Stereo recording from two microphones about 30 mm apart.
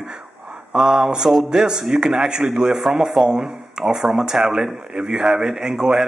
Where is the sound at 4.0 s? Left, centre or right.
Centre.